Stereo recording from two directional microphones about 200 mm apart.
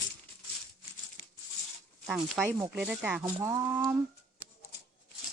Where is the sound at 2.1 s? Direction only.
5° right (ahead or behind).